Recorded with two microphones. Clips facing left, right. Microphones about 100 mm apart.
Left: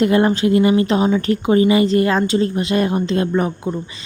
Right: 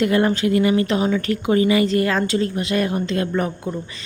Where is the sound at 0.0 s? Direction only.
25° left (ahead or behind).